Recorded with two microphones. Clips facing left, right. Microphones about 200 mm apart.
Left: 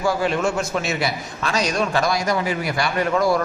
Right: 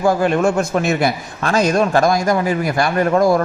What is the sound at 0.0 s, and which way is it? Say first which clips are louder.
A man's voice: right 6 dB; 50° right (ahead or behind).